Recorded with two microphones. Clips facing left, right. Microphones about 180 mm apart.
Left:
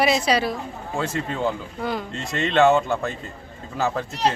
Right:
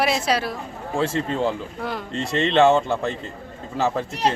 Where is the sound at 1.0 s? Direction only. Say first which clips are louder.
Right 3 dB; 30° right (ahead or behind).